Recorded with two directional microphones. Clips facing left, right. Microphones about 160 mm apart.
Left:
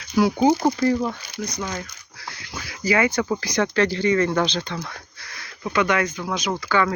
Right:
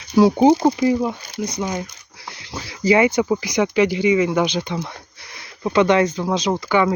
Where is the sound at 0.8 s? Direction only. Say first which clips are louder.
Right 3 dB; 10° right (ahead or behind).